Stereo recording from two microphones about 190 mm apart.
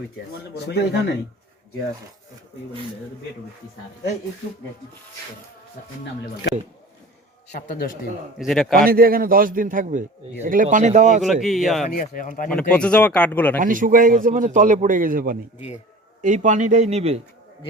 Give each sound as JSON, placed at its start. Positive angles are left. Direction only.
{"t": 0.7, "sound": "speech", "side_deg": 60}
{"t": 7.7, "sound": "speech", "side_deg": 45}
{"t": 8.4, "sound": "a man's voice", "side_deg": 0}
{"t": 8.7, "sound": "a man's voice", "side_deg": -50}
{"t": 11.2, "sound": "a man's voice", "side_deg": 0}
{"t": 11.9, "sound": "speech", "side_deg": 45}
{"t": 12.5, "sound": "speech", "side_deg": 5}
{"t": 13.6, "sound": "a man's voice", "side_deg": -45}